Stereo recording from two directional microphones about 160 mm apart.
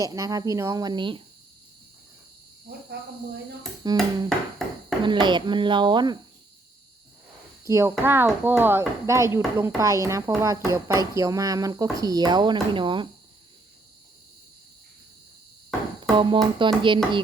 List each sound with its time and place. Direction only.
0.0 s speech: 20° right (ahead or behind)
3.8 s speech: 25° right (ahead or behind)
4.3 s music: centre (ahead or behind)
5.0 s speech: 30° right (ahead or behind)
7.6 s speech: 15° right (ahead or behind)
16.1 s music: 30° right (ahead or behind)